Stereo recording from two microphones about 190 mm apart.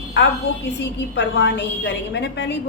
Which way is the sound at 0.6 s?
65° left (ahead or behind).